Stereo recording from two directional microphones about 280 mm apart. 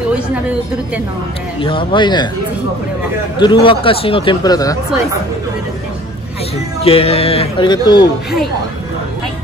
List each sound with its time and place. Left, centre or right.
0.1 s a woman's voice: centre
1.6 s speech: centre
3.3 s speech: centre
6.8 s speech: left